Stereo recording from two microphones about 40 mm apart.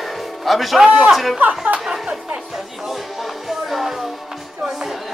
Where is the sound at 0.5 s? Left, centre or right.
Centre.